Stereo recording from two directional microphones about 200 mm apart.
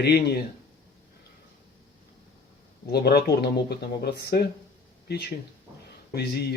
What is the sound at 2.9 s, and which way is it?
Speech, 55° left (ahead or behind).